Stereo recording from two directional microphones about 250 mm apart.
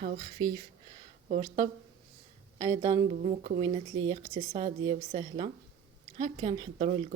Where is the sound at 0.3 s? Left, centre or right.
Centre.